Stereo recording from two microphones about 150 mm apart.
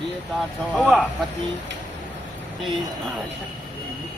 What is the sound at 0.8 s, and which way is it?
Speech, centre (ahead or behind).